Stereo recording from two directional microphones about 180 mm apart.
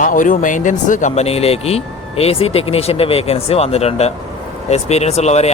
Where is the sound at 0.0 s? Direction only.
50° left (ahead or behind).